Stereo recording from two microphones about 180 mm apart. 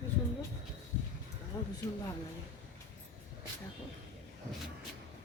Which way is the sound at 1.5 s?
20° left (ahead or behind).